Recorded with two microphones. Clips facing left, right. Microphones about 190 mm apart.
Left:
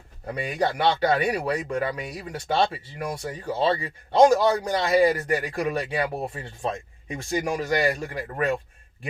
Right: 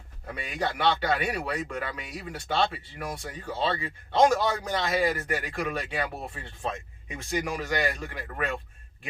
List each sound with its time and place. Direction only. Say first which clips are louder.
0.3 s speech: left 6 dB; 40° left (ahead or behind)